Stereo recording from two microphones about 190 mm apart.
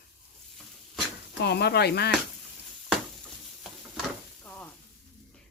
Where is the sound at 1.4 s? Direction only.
60° left (ahead or behind).